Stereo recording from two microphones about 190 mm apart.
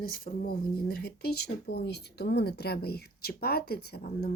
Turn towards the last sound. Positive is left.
turn(degrees=50)  # may be behind; listen again after turning